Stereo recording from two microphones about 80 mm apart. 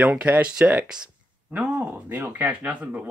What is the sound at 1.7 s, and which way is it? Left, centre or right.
Speech, right.